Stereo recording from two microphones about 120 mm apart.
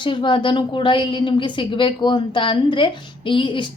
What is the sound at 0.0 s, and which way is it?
A woman's voice, 45° left (ahead or behind).